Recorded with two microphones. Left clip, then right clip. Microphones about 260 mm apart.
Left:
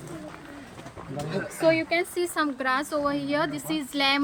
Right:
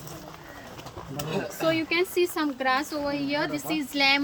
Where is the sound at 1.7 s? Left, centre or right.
Left.